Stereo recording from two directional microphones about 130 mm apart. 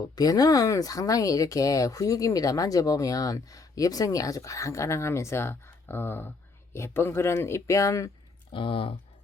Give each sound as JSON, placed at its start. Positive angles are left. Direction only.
{"t": 0.0, "sound": "speech", "side_deg": 30}
{"t": 8.5, "sound": "speech", "side_deg": 40}